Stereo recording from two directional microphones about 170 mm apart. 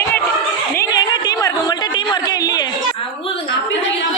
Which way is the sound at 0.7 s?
25° left (ahead or behind).